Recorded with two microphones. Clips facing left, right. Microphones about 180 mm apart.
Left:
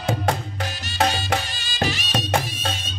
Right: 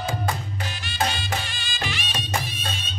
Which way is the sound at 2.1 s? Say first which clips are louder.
Left 6 dB; 65° left (ahead or behind).